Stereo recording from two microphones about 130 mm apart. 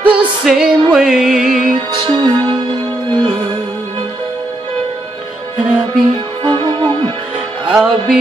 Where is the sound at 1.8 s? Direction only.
40° right (ahead or behind).